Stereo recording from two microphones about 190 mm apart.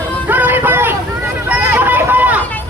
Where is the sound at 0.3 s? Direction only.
10° right (ahead or behind).